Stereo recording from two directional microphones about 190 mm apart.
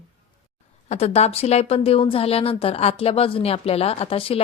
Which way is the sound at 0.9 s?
35° left (ahead or behind).